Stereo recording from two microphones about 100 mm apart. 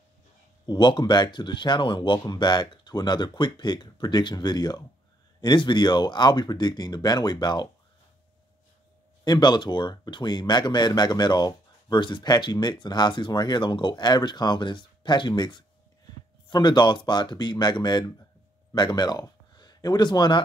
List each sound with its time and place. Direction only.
0.7 s speech: 50° left (ahead or behind)
9.2 s speech: 45° left (ahead or behind)